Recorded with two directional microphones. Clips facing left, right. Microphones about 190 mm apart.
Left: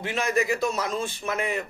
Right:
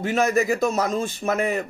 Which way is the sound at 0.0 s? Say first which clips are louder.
Right 5 dB; 45° right (ahead or behind).